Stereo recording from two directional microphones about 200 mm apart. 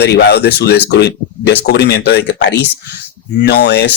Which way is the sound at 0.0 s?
55° left (ahead or behind).